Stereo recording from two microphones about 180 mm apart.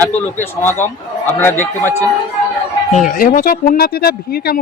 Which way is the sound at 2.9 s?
45° left (ahead or behind).